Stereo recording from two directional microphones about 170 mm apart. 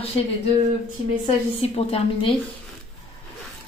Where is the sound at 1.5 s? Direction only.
35° left (ahead or behind).